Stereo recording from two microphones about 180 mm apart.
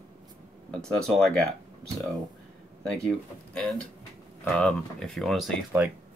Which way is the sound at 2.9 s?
5° left (ahead or behind).